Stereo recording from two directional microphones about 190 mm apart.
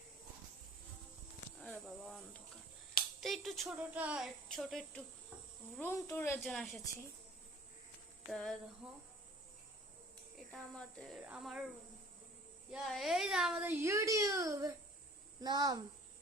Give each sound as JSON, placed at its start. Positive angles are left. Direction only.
{"t": 1.6, "sound": "a sound", "side_deg": 5}
{"t": 3.2, "sound": "speech", "side_deg": 0}
{"t": 5.7, "sound": "speech", "side_deg": 10}
{"t": 6.4, "sound": "speech", "side_deg": 0}
{"t": 8.3, "sound": "speech", "side_deg": 0}
{"t": 10.5, "sound": "speech", "side_deg": 0}
{"t": 12.7, "sound": "a child's voice", "side_deg": 0}